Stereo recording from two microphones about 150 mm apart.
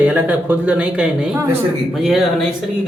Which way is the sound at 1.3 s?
15° right (ahead or behind).